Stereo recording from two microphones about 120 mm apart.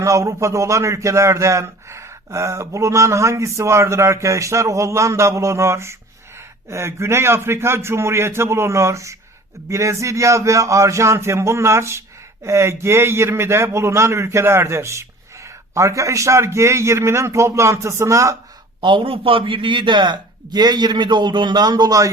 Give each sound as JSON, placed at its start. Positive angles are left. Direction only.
{"t": 0.0, "sound": "a man's voice", "side_deg": -25}
{"t": 18.8, "sound": "a man's voice", "side_deg": -45}